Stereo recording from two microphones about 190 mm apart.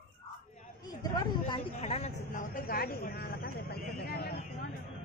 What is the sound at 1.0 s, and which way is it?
Speech, 30° left (ahead or behind).